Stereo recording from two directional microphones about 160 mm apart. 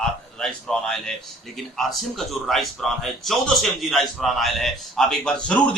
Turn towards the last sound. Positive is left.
turn(degrees=5)  # may be behind; listen again after turning